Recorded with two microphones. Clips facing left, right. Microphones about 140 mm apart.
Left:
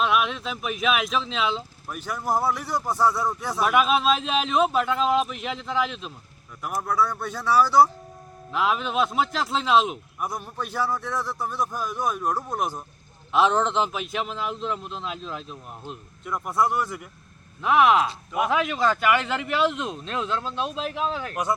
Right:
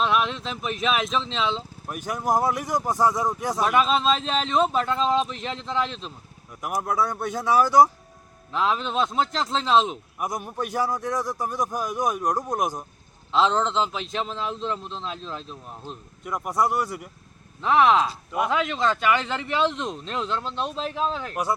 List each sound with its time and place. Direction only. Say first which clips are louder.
0.0 s a sound: even; 5° left (ahead or behind)
0.4 s a man's voice: left 1 dB; 5° left (ahead or behind)
1.9 s a man's voice: right 2 dB; 15° right (ahead or behind)
3.6 s a man's voice: left 1 dB; 5° left (ahead or behind)
6.6 s a man's voice: even; 15° right (ahead or behind)
8.5 s speech: even; 5° left (ahead or behind)
10.2 s a man's voice: right 4 dB; 15° right (ahead or behind)
13.3 s speech: left 1 dB; 15° left (ahead or behind)
14.4 s speech: even; 5° left (ahead or behind)
16.2 s a man's voice: even; 10° right (ahead or behind)
17.6 s speech: even; 5° left (ahead or behind)